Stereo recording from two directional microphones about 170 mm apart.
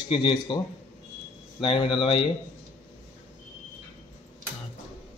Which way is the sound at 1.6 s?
30° left (ahead or behind).